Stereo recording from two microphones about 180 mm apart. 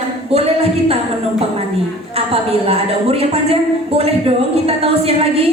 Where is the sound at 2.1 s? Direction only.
35° right (ahead or behind).